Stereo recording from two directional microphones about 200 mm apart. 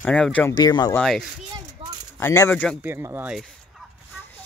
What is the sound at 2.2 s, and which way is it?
Speech, 15° left (ahead or behind).